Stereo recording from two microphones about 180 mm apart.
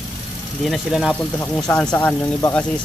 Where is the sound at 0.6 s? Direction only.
Centre (ahead or behind).